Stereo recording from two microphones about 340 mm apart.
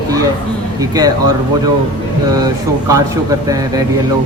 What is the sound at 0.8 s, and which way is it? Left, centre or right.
Speech, centre.